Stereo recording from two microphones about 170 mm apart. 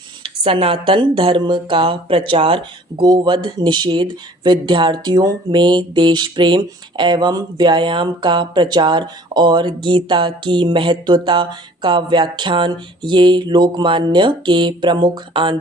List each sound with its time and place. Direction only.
0.2 s speech: 30° right (ahead or behind)